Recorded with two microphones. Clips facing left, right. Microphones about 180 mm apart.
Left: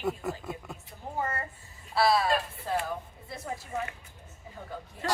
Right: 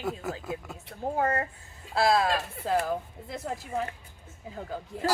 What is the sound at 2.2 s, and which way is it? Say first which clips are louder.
Speech: right 1 dB; 90° right.